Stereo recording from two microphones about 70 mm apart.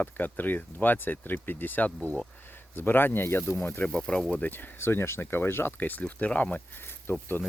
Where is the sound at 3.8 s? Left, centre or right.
Centre.